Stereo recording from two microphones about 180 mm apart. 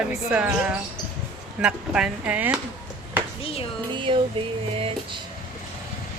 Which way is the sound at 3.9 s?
25° right (ahead or behind).